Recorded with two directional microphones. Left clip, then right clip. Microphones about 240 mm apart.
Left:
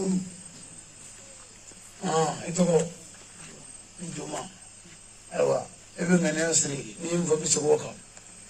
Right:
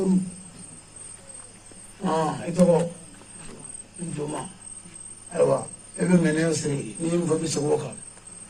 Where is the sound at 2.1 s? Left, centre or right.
Left.